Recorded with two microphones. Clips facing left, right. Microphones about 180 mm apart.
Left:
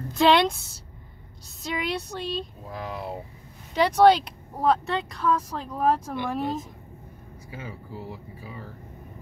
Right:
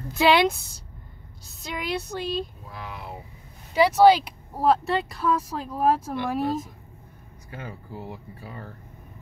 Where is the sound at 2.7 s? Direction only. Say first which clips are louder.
Left 5 dB; 40° left (ahead or behind).